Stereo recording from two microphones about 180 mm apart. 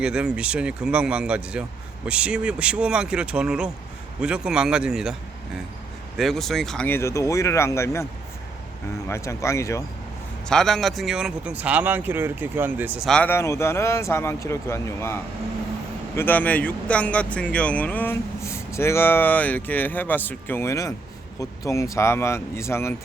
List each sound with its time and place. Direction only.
0.0 s speech: 5° right (ahead or behind)
6.1 s speech: centre (ahead or behind)
9.0 s speech: 15° left (ahead or behind)
10.5 s speech: centre (ahead or behind)
13.1 s speech: 10° left (ahead or behind)